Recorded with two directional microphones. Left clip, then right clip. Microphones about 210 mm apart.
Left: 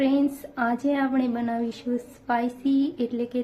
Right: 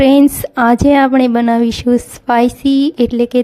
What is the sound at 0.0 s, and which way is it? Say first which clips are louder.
Speech: right 15 dB; 50° right (ahead or behind).